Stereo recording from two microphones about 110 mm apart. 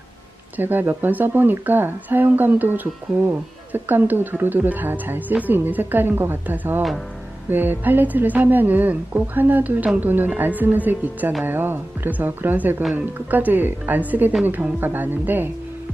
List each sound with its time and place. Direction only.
0.5 s a woman's voice: 20° right (ahead or behind)